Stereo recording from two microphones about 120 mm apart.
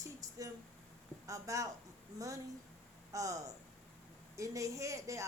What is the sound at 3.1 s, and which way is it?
Speech, 30° right (ahead or behind).